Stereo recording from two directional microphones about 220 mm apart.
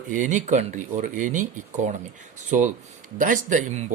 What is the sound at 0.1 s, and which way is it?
Speech, 35° right (ahead or behind).